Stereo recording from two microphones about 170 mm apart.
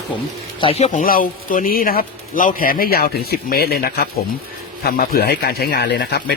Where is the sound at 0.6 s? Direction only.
40° left (ahead or behind).